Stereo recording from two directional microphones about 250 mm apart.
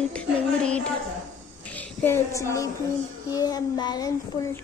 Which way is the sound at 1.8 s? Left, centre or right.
Centre.